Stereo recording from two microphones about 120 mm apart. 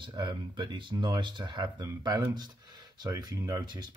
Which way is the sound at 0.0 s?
40° right (ahead or behind).